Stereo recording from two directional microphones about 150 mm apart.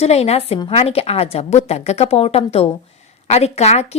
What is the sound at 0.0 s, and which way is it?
A woman's voice, 45° left (ahead or behind).